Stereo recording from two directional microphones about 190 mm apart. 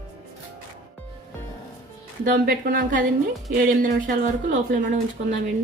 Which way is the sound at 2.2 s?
50° right (ahead or behind).